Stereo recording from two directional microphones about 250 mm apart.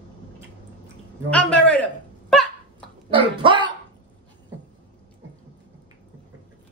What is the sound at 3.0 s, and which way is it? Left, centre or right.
Speech, centre.